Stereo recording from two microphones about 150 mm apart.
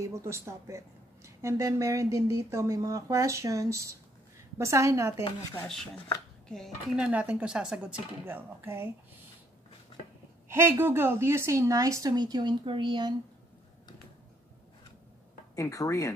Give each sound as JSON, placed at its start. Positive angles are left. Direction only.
{"t": 0.0, "sound": "speech", "side_deg": -20}
{"t": 6.5, "sound": "speech", "side_deg": 0}
{"t": 7.1, "sound": "a woman's voice", "side_deg": -10}
{"t": 10.5, "sound": "speech", "side_deg": -15}
{"t": 15.5, "sound": "speech", "side_deg": 20}